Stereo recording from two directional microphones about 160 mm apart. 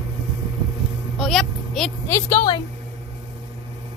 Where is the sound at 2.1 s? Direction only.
15° left (ahead or behind).